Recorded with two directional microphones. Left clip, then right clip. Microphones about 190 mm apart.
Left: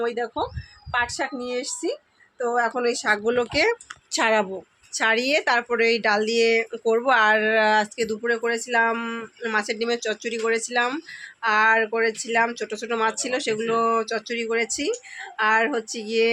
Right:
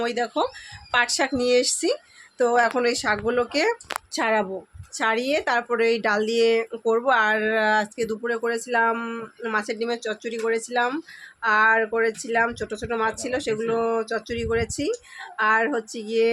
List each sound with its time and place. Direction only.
0.0 s speech: 35° right (ahead or behind)
2.6 s speech: 10° right (ahead or behind)